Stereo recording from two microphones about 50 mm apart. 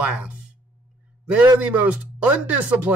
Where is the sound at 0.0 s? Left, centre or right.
Right.